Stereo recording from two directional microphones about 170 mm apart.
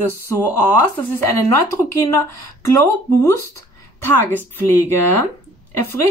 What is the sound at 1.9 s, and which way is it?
Speech, 15° left (ahead or behind).